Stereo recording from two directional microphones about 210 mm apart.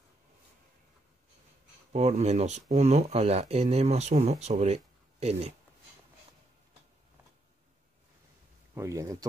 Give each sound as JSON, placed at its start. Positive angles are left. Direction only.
{"t": 1.9, "sound": "speech", "side_deg": -30}
{"t": 8.7, "sound": "speech", "side_deg": -15}